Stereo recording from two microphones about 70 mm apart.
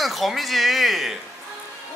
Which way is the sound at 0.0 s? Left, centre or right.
Centre.